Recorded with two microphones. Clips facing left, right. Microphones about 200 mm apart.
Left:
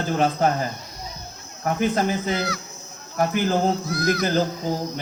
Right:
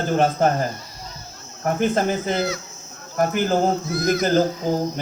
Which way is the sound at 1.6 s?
50° right (ahead or behind).